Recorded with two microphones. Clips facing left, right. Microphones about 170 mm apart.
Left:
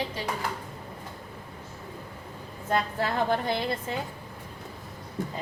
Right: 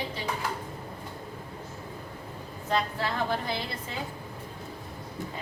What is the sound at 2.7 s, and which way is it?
Speech, 50° left (ahead or behind).